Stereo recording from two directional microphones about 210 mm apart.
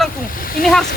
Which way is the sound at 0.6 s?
40° left (ahead or behind).